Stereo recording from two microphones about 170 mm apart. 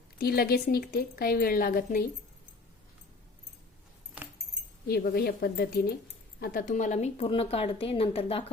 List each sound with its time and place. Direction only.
0.2 s speech: 65° left (ahead or behind)
4.9 s speech: 65° left (ahead or behind)
6.4 s a woman's voice: 55° left (ahead or behind); by 8.4 s 35° left (ahead or behind)